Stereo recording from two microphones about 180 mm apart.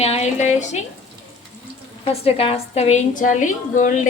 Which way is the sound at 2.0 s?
35° left (ahead or behind).